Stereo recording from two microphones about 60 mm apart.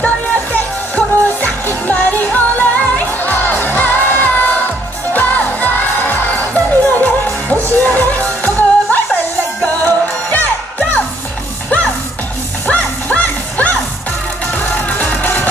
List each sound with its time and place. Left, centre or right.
0.0 s music: left
12.6 s music: left